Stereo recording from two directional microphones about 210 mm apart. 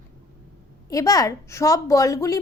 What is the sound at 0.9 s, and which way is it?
A woman's voice, 15° left (ahead or behind).